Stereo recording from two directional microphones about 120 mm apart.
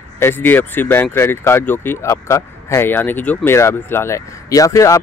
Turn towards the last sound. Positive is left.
turn(degrees=25)  # may be behind; listen again after turning